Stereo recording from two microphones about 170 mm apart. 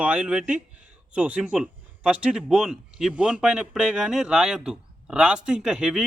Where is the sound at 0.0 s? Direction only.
5° right (ahead or behind).